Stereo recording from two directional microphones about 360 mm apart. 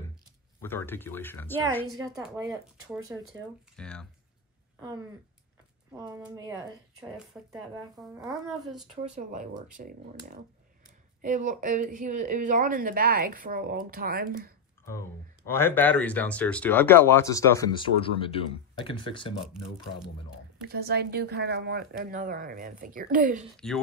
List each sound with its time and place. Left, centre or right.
0.6 s speech: centre
2.1 s speech: centre
4.7 s speech: centre
9.1 s speech: right
11.1 s speech: right
14.9 s speech: centre
19.4 s speech: centre
20.6 s speech: right
23.6 s speech: centre